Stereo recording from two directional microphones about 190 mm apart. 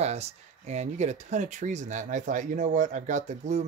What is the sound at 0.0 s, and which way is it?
Speech, 35° right (ahead or behind).